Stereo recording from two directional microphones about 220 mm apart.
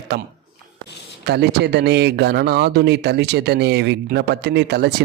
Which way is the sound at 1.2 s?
45° right (ahead or behind).